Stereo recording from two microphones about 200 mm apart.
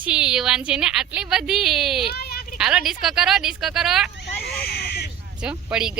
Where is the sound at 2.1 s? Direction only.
50° left (ahead or behind).